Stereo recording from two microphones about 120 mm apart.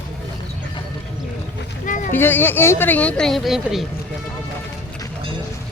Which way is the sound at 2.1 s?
15° left (ahead or behind).